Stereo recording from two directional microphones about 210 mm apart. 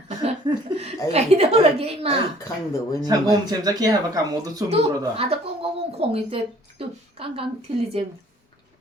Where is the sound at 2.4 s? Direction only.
15° left (ahead or behind).